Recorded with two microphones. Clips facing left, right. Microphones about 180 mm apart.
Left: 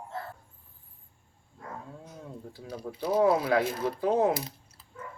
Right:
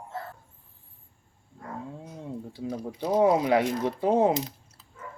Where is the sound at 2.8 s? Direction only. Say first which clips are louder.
Right 2 dB; 15° right (ahead or behind).